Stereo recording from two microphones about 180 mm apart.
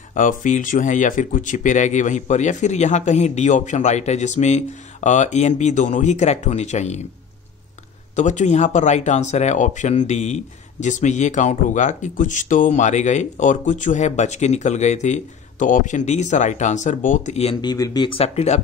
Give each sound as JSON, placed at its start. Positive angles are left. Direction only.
{"t": 0.1, "sound": "speech", "side_deg": 45}
{"t": 8.2, "sound": "speech", "side_deg": 40}
{"t": 17.6, "sound": "speech", "side_deg": 20}